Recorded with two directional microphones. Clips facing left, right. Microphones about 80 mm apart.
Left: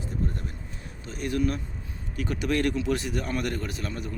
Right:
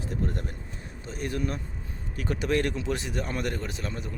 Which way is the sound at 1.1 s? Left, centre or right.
Right.